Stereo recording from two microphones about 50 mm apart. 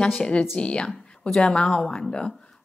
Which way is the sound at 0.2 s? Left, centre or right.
Centre.